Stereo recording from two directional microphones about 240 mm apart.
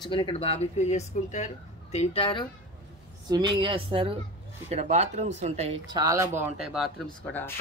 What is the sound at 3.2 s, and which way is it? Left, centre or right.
Speech, centre.